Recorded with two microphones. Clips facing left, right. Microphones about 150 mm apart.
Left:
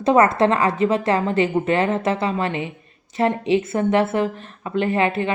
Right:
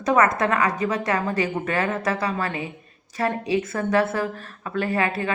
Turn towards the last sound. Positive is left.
turn(degrees=20)  # may be behind; listen again after turning